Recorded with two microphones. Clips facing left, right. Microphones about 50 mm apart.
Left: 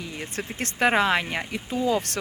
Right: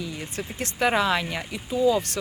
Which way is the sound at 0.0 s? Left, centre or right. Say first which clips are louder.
Even; left.